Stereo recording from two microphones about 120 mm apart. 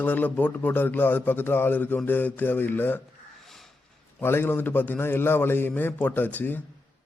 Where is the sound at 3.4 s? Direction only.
Centre (ahead or behind).